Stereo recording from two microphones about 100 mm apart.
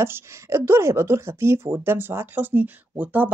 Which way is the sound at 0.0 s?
25° right (ahead or behind).